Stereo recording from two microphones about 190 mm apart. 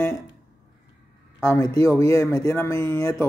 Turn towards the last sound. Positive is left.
turn(degrees=15)  # may be behind; listen again after turning